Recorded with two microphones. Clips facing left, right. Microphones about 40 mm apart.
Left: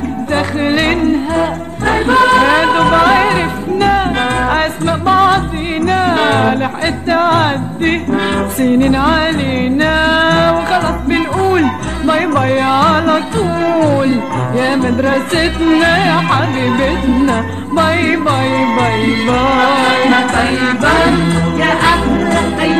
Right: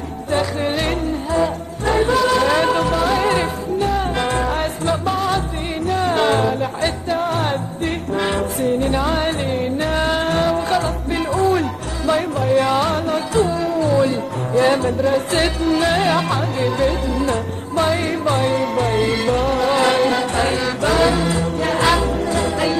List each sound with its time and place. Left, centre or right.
0.3 s music: left
8.1 s music: left
8.5 s music: left
12.2 s music: left
12.5 s music: left
12.9 s music: left
13.4 s music: left
13.7 s music: left
13.9 s music: left
14.8 s music: left
19.8 s music: left
21.5 s music: left